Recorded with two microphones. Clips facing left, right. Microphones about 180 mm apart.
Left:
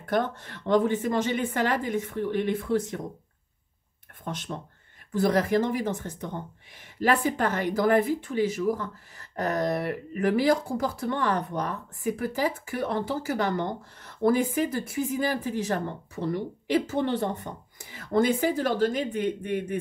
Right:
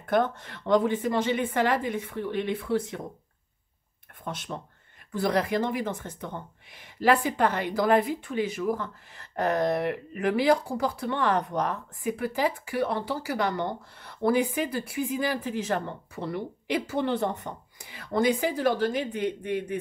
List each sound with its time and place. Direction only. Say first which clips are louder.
0.5 s speech: left 3 dB; 45° left (ahead or behind)
5.3 s speech: left 1 dB; 45° left (ahead or behind)